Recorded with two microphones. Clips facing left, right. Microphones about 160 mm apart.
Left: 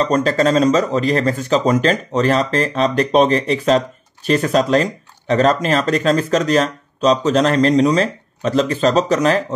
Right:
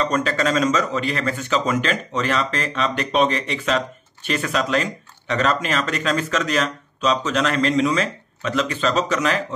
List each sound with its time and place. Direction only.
0.0 s speech: 35° left (ahead or behind)